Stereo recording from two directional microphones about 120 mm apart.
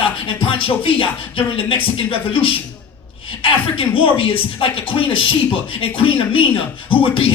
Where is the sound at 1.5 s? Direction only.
50° left (ahead or behind).